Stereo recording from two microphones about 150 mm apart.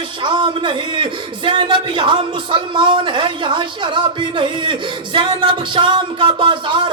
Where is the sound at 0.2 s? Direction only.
30° right (ahead or behind).